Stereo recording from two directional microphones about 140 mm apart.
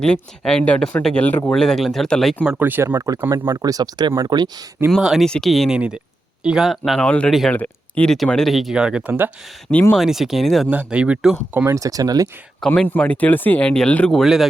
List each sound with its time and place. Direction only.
0.0 s speech: 5° left (ahead or behind)
2.4 s speech: 10° right (ahead or behind); by 4.6 s 30° right (ahead or behind)
4.9 s speech: centre (ahead or behind)
9.9 s speech: centre (ahead or behind)
11.6 s speech: 25° right (ahead or behind)
12.5 s speech: 5° left (ahead or behind)